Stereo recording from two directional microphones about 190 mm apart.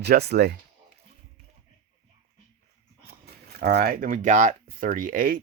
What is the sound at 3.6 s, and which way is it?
Speech, 55° right (ahead or behind).